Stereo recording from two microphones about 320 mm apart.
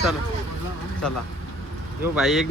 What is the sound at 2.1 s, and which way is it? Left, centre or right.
Speech, centre.